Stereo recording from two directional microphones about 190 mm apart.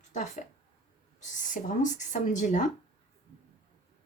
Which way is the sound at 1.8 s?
40° left (ahead or behind).